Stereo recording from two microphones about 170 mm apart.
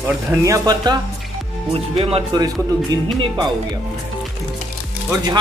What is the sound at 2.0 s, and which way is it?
Speech, 35° right (ahead or behind).